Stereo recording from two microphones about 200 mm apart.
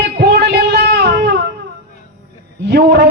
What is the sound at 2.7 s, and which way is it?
Speech, 55° right (ahead or behind).